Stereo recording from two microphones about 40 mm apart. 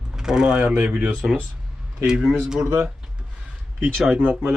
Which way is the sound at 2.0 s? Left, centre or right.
Centre.